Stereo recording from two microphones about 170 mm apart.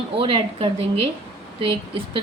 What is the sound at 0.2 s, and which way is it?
A woman's voice, 30° right (ahead or behind).